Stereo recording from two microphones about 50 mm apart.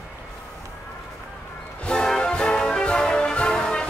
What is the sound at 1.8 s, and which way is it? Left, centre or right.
Music, centre.